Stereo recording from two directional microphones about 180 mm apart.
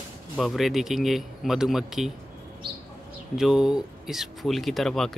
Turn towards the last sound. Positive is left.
turn(degrees=0)  # may be behind; listen again after turning